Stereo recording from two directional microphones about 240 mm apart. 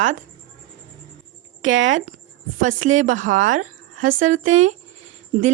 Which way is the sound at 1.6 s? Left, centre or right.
Right.